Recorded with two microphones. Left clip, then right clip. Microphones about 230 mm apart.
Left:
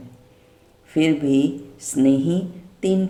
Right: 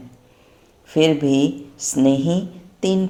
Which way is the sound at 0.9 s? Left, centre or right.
Centre.